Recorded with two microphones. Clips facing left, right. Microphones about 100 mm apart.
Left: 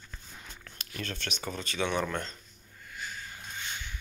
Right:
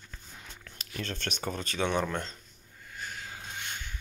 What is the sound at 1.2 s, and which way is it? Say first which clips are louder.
Speech: right 2 dB; 45° right (ahead or behind).